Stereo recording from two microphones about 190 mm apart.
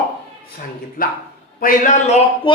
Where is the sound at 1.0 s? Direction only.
50° left (ahead or behind).